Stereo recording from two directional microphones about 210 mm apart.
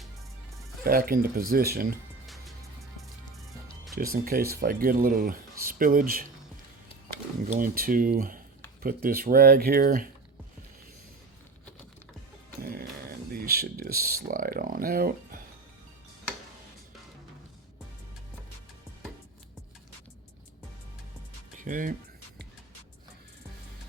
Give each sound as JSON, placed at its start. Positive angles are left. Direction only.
{"t": 0.9, "sound": "speech", "side_deg": -45}
{"t": 2.2, "sound": "music", "side_deg": 0}
{"t": 3.9, "sound": "speech", "side_deg": -45}
{"t": 7.5, "sound": "speech", "side_deg": -40}
{"t": 12.6, "sound": "speech", "side_deg": -45}
{"t": 21.6, "sound": "speech", "side_deg": -40}